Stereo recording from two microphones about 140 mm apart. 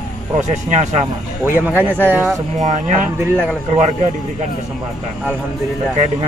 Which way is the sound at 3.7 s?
55° right (ahead or behind).